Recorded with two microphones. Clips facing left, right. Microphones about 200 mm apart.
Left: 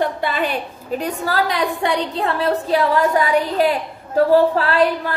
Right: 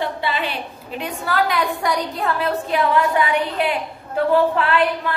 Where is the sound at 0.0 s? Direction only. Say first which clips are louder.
Left 3 dB; 45° left (ahead or behind).